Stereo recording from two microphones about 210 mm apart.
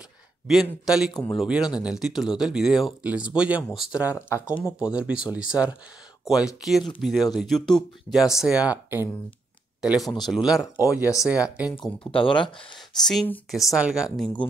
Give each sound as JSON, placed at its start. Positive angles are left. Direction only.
{"t": 0.5, "sound": "speech", "side_deg": 0}
{"t": 1.1, "sound": "speech", "side_deg": 20}
{"t": 1.4, "sound": "speech", "side_deg": 0}
{"t": 4.3, "sound": "speech", "side_deg": 15}
{"t": 4.7, "sound": "speech", "side_deg": -5}
{"t": 11.7, "sound": "speech", "side_deg": 5}
{"t": 12.1, "sound": "speech", "side_deg": 25}
{"t": 12.7, "sound": "speech", "side_deg": 0}